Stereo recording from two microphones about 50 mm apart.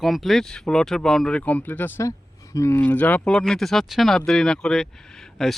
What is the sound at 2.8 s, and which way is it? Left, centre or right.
Speech, left.